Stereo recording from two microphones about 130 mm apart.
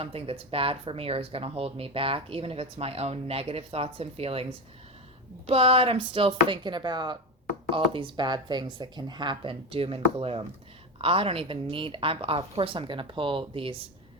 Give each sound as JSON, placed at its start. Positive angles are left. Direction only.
{"t": 0.0, "sound": "speech", "side_deg": -50}
{"t": 5.5, "sound": "speech", "side_deg": -45}